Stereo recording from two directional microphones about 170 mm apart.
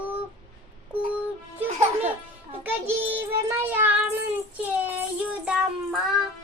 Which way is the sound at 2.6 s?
10° right (ahead or behind).